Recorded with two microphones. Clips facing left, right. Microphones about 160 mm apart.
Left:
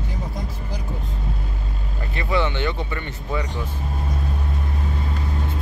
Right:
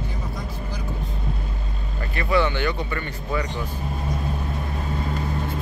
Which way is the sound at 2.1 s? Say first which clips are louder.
Right 2 dB; 20° left (ahead or behind).